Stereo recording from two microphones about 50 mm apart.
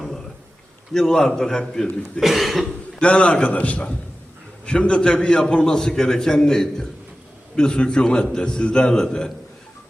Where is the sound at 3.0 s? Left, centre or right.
Left.